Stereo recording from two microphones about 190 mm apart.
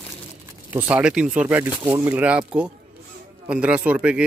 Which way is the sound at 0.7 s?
5° right (ahead or behind).